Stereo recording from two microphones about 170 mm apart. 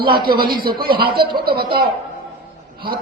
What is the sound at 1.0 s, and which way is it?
Speech, 65° right (ahead or behind).